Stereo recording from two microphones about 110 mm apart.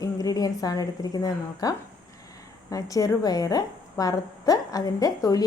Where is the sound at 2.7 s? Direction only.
30° left (ahead or behind).